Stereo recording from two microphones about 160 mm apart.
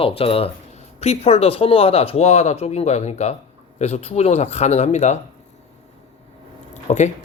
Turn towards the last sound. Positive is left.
turn(degrees=50)  # may be behind; listen again after turning